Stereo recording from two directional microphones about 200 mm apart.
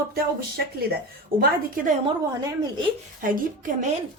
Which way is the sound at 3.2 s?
45° right (ahead or behind).